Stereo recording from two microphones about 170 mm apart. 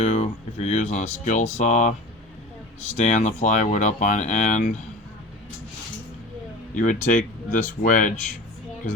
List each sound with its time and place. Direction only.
0.0 s speech: 40° left (ahead or behind)
2.9 s speech: 40° left (ahead or behind)
6.7 s speech: 50° left (ahead or behind)